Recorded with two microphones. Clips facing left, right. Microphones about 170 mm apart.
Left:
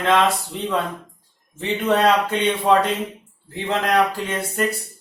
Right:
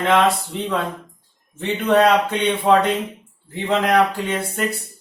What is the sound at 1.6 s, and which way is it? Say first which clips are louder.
Speech: right 2 dB; centre (ahead or behind).